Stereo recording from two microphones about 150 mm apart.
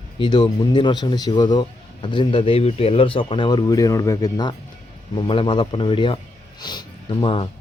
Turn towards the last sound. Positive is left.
turn(degrees=35)  # may be behind; listen again after turning